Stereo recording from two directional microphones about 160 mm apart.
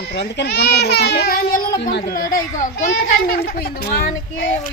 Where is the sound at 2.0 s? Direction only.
65° left (ahead or behind).